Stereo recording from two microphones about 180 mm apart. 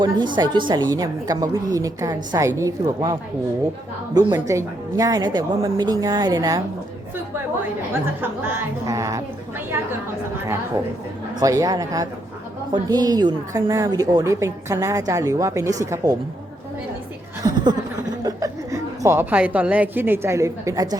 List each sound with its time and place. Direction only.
0.0 s a woman's voice: 25° right (ahead or behind)
4.4 s a woman's voice: 15° right (ahead or behind)
8.2 s a woman's voice: 10° right (ahead or behind)
11.3 s a woman's voice: 20° right (ahead or behind)
17.4 s chuckle: 25° right (ahead or behind)
18.2 s a woman's voice: 20° right (ahead or behind)